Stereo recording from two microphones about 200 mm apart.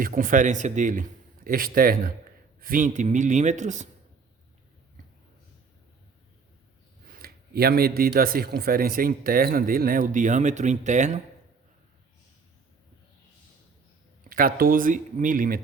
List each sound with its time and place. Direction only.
0.0 s a man's voice: 45° right (ahead or behind)
7.1 s speech: 50° right (ahead or behind)
14.3 s speech: 45° right (ahead or behind)